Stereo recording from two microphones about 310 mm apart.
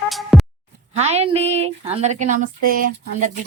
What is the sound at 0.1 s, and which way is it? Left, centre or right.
Music, centre.